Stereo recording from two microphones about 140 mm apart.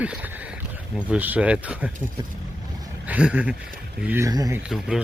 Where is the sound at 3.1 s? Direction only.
10° right (ahead or behind).